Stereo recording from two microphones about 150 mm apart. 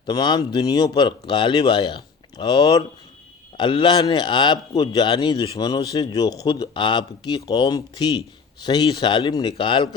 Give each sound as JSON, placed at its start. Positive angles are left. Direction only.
{"t": 0.0, "sound": "speech", "side_deg": 30}